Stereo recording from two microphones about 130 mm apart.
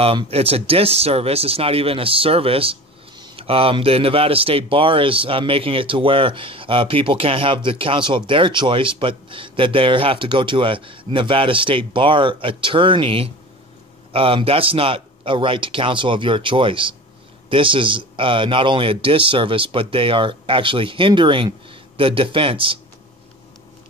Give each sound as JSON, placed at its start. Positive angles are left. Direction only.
{"t": 0.0, "sound": "speech", "side_deg": -45}